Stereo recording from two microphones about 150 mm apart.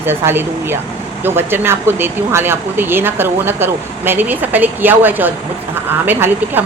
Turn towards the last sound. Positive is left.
turn(degrees=-15)  # may be behind; listen again after turning